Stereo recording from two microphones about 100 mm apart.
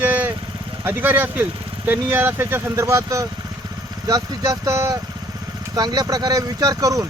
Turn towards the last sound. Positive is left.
turn(degrees=-35)  # may be behind; listen again after turning